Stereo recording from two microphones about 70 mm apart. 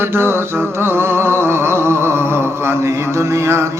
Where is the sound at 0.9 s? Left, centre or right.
Right.